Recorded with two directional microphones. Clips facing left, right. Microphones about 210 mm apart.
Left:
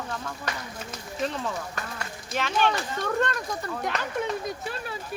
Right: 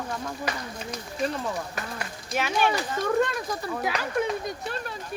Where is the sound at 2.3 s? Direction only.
10° right (ahead or behind).